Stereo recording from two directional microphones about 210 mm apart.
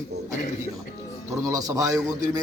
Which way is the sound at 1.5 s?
15° right (ahead or behind).